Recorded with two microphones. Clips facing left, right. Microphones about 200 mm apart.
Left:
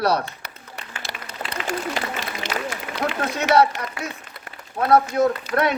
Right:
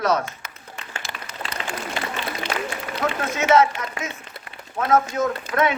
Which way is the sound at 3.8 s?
35° left (ahead or behind).